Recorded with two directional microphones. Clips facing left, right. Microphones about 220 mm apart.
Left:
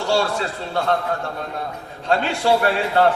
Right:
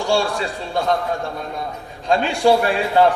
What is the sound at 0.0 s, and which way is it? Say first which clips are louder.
Speech: right 1 dB; 15° right (ahead or behind).